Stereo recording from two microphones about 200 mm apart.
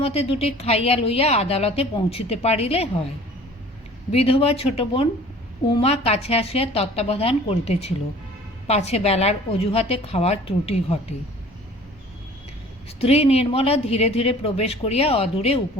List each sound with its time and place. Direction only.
0.0 s a woman's voice: 30° left (ahead or behind)
4.1 s a woman's voice: 30° left (ahead or behind)
13.0 s a woman's voice: 30° left (ahead or behind)